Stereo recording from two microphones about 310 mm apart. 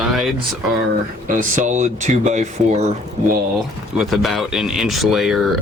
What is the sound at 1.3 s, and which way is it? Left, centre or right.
Speech, right.